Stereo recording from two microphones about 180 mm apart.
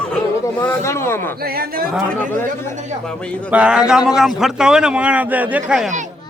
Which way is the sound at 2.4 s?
10° left (ahead or behind).